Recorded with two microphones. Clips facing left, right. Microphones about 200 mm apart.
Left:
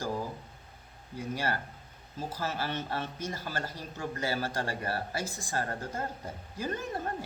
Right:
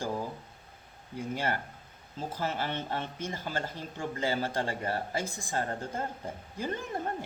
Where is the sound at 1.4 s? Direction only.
20° right (ahead or behind).